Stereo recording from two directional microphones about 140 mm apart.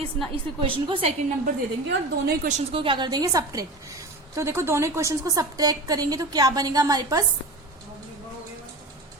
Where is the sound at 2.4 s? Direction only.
60° right (ahead or behind).